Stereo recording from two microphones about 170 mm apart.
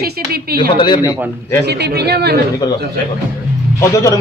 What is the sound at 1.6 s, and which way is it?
Speech, 75° right (ahead or behind).